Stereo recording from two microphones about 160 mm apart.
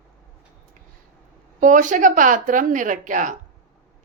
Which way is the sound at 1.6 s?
55° right (ahead or behind).